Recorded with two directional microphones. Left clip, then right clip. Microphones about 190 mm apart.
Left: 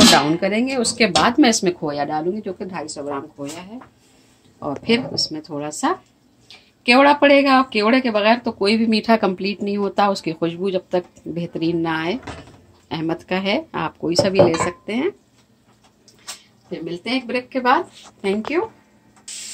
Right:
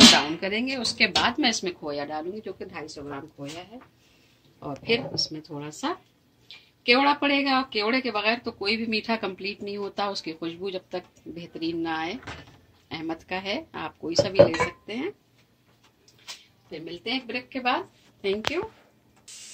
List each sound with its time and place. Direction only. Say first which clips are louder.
0.4 s speech: left 8 dB; 60° left (ahead or behind)
4.9 s speech: left 4 dB; 35° left (ahead or behind)
16.8 s speech: left 6 dB; 40° left (ahead or behind)